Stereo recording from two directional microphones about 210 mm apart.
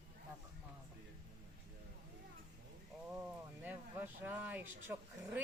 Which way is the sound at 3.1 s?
5° right (ahead or behind).